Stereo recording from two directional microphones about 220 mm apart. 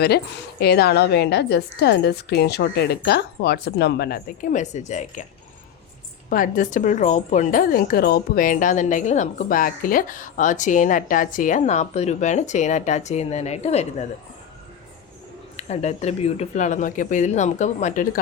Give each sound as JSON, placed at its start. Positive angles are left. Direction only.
{"t": 0.6, "sound": "a woman's voice", "side_deg": 45}
{"t": 6.3, "sound": "speech", "side_deg": 35}
{"t": 15.5, "sound": "speech", "side_deg": 30}